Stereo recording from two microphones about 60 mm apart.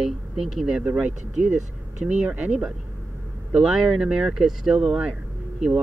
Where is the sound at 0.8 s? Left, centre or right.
Right.